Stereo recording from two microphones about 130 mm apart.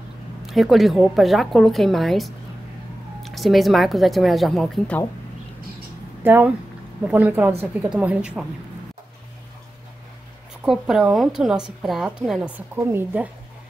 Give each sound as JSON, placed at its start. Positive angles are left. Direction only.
{"t": 0.5, "sound": "a woman's voice", "side_deg": 0}
{"t": 6.2, "sound": "a woman's voice", "side_deg": -15}
{"t": 10.6, "sound": "a woman's voice", "side_deg": -5}
{"t": 12.7, "sound": "a woman's voice", "side_deg": -20}